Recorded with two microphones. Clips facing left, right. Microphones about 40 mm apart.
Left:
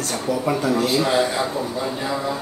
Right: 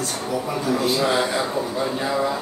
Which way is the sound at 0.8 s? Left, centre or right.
Centre.